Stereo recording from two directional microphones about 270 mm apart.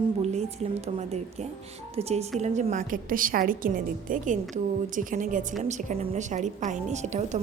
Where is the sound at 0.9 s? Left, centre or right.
Right.